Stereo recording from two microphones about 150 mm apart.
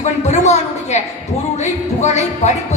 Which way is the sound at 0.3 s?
50° left (ahead or behind).